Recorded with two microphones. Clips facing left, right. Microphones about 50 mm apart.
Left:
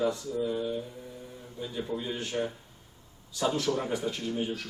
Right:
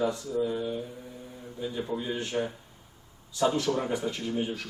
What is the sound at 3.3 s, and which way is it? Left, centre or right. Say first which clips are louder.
Speech: right 2 dB; centre.